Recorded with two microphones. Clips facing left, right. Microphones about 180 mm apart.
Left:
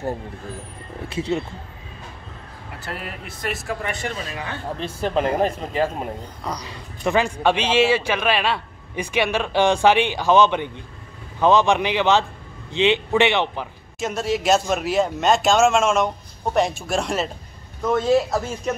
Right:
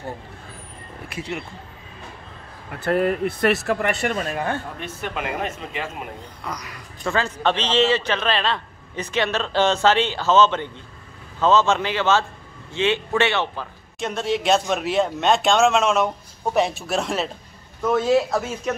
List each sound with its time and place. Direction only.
1.0 s speech: 25° left (ahead or behind)
2.8 s speech: 55° right (ahead or behind)
4.7 s a man's voice: 30° left (ahead or behind)
7.1 s a man's voice: 15° left (ahead or behind)
13.9 s speech: centre (ahead or behind)